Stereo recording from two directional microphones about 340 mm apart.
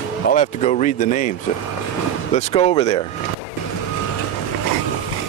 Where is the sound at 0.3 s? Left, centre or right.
Left.